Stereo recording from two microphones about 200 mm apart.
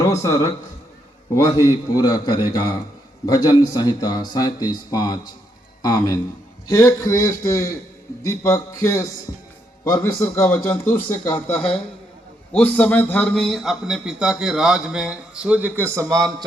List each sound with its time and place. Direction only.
0.0 s a man's voice: 15° left (ahead or behind)
1.6 s a man's voice: 20° left (ahead or behind); by 16.3 s 20° right (ahead or behind)